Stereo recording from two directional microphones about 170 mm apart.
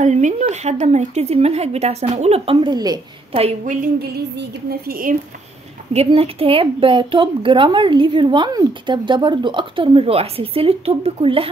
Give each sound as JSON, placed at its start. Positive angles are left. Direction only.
{"t": 0.0, "sound": "a woman's voice", "side_deg": -45}
{"t": 4.4, "sound": "a sound", "side_deg": -65}
{"t": 5.9, "sound": "a woman's voice", "side_deg": -35}